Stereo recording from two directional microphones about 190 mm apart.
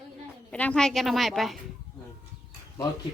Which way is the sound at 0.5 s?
5° left (ahead or behind).